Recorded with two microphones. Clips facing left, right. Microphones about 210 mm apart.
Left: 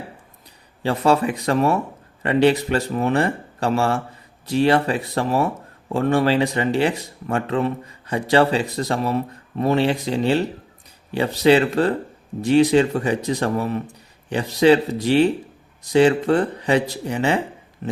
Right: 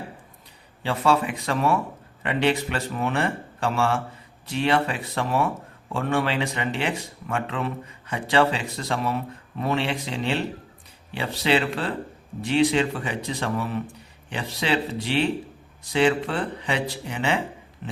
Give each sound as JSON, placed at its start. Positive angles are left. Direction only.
{"t": 0.8, "sound": "speech", "side_deg": 40}